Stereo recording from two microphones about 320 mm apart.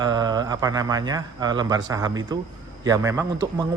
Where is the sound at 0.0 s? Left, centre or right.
Centre.